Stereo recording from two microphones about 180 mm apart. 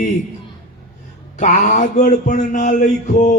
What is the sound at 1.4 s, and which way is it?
A man's voice, 40° left (ahead or behind).